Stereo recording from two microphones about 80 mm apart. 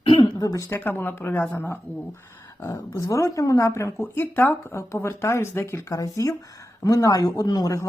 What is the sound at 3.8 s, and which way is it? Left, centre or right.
Speech, left.